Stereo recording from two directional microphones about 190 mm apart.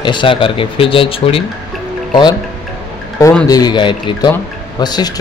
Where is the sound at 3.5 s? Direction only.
25° left (ahead or behind).